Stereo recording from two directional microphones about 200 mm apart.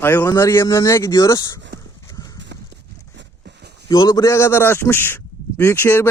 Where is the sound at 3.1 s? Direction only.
55° right (ahead or behind).